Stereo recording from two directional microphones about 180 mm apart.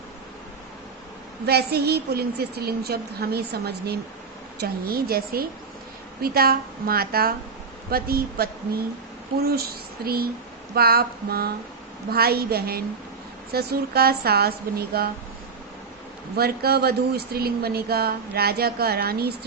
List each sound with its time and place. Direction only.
1.5 s speech: 65° right (ahead or behind)
16.3 s speech: 60° right (ahead or behind)